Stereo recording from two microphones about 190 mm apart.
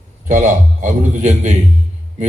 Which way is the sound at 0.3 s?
45° right (ahead or behind).